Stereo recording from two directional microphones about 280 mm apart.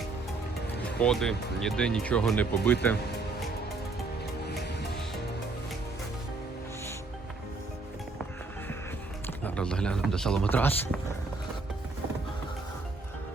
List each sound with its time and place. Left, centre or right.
0.9 s speech: centre
4.4 s music: left
9.2 s speech: centre